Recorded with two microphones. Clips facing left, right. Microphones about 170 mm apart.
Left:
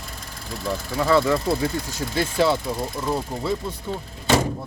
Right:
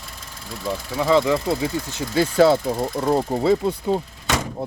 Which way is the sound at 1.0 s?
15° right (ahead or behind).